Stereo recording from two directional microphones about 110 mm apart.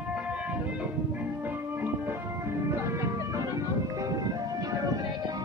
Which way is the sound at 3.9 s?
35° right (ahead or behind).